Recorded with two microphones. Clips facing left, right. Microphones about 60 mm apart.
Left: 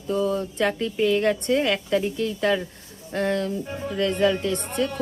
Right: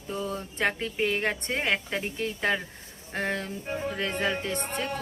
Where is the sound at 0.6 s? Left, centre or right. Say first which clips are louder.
Left 2 dB; right.